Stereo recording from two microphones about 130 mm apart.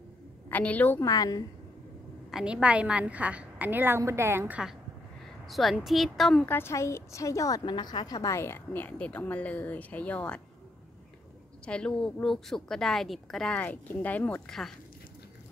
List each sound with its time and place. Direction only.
0.5 s a woman's voice: 10° left (ahead or behind)
1.0 s a woman's voice: 30° left (ahead or behind)
2.3 s a woman's voice: 10° right (ahead or behind)
6.4 s a woman's voice: 15° left (ahead or behind)
11.6 s speech: 5° left (ahead or behind)